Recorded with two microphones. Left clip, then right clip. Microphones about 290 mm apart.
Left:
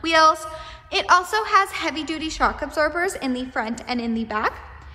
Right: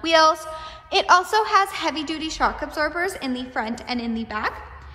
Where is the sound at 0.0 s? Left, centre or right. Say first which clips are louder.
Even; centre.